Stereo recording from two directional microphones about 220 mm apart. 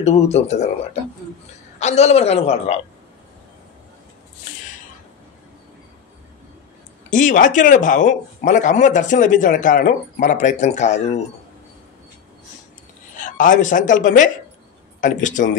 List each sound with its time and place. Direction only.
0.0 s speech: 30° left (ahead or behind)
1.8 s a woman's voice: 30° left (ahead or behind)
7.1 s speech: 35° left (ahead or behind)
13.2 s speech: 35° left (ahead or behind)